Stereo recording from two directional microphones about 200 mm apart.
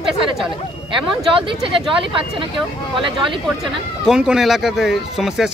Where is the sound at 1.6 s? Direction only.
25° right (ahead or behind).